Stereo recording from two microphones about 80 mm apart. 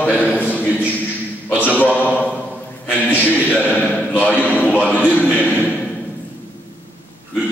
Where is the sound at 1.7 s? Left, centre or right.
Left.